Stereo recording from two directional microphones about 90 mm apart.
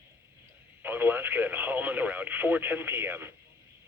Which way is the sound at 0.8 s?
25° right (ahead or behind).